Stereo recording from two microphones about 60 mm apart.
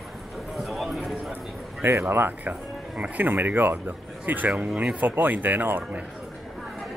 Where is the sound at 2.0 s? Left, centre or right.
Right.